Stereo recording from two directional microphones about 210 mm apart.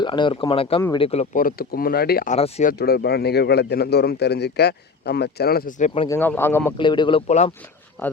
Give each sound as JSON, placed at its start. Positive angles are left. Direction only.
{"t": 0.0, "sound": "speech", "side_deg": 20}
{"t": 2.7, "sound": "a man's voice", "side_deg": 50}
{"t": 6.1, "sound": "speech", "side_deg": 10}
{"t": 6.7, "sound": "speech", "side_deg": 20}
{"t": 7.3, "sound": "speech", "side_deg": 30}